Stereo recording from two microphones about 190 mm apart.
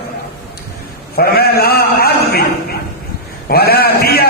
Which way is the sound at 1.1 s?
55° left (ahead or behind).